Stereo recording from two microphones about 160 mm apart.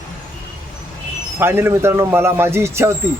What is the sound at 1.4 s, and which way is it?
Speech, 15° right (ahead or behind).